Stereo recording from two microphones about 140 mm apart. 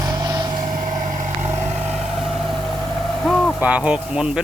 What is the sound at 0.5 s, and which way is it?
Vehicle, 75° right (ahead or behind).